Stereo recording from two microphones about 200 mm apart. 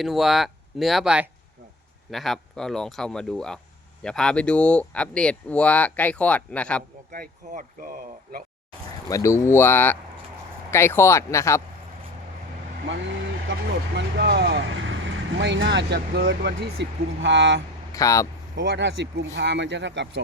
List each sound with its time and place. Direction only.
0.0 s speech: centre (ahead or behind)
7.1 s speech: 45° right (ahead or behind)
9.0 s speech: 15° left (ahead or behind)
12.9 s speech: 65° right (ahead or behind)
17.9 s speech: 15° left (ahead or behind)
18.5 s speech: 65° right (ahead or behind)